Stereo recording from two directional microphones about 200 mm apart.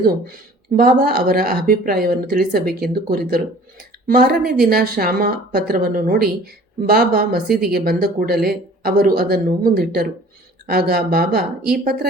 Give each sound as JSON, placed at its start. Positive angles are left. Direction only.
{"t": 0.0, "sound": "speech", "side_deg": -50}